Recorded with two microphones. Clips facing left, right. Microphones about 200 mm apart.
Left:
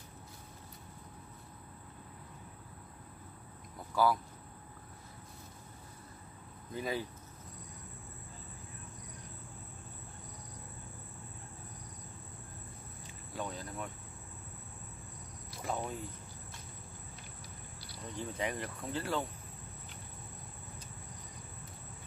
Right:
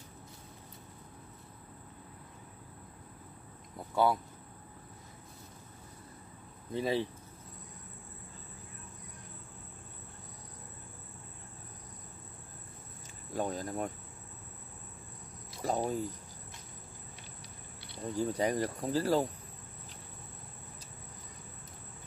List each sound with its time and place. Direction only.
3.7 s speech: 25° right (ahead or behind)
6.7 s speech: 30° right (ahead or behind)
13.3 s speech: 45° right (ahead or behind)
15.6 s speech: 40° right (ahead or behind)
18.1 s speech: 40° right (ahead or behind)